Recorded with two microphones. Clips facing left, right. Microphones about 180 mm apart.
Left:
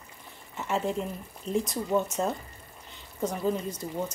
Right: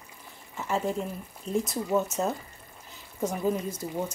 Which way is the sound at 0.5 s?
Centre (ahead or behind).